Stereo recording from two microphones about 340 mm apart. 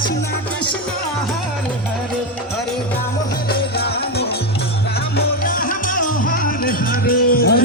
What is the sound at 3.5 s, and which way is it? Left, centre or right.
Music, left.